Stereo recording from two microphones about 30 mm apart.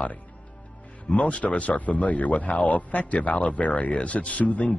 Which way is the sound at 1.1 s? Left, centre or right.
Left.